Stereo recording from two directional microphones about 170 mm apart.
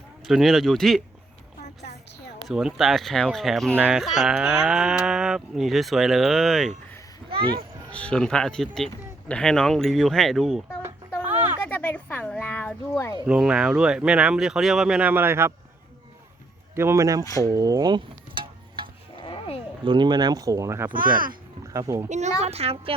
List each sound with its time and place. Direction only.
0.3 s speech: centre (ahead or behind)
2.5 s speech: 5° right (ahead or behind)
7.3 s speech: 30° right (ahead or behind)
7.9 s speech: 5° left (ahead or behind)
11.7 s a sound: 10° left (ahead or behind)
13.2 s speech: 5° right (ahead or behind)
16.7 s speech: 15° right (ahead or behind)
17.4 s a sound: 20° right (ahead or behind)
19.1 s a sound: 30° left (ahead or behind)
19.8 s speech: 30° right (ahead or behind)
20.9 s speech: 55° right (ahead or behind)
21.7 s speech: 20° right (ahead or behind)
22.4 s speech: 35° right (ahead or behind)